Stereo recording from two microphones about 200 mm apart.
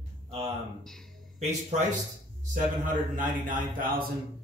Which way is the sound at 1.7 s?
35° right (ahead or behind).